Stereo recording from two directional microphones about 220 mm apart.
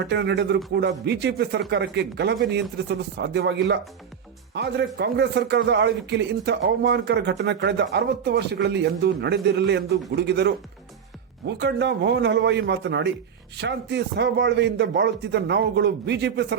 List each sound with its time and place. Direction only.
0.0 s speech: 50° right (ahead or behind)